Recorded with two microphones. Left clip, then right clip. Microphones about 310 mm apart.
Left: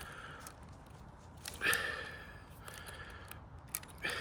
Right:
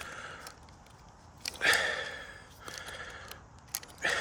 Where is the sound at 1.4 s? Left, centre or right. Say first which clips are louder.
Right 7 dB; right.